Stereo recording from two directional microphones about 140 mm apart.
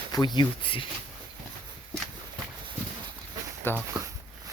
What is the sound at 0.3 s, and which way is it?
Speech, 40° left (ahead or behind).